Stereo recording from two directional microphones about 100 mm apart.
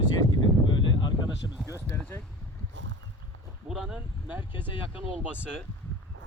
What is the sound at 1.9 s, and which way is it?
Speech, 25° left (ahead or behind).